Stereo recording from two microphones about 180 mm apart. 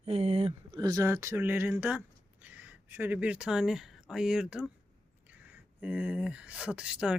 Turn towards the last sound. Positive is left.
turn(degrees=-5)  # may be behind; listen again after turning